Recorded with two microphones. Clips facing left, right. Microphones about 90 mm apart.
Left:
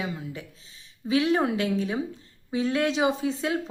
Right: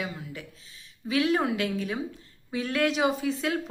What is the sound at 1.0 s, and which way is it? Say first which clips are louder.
A woman's voice: left 2 dB; 25° left (ahead or behind).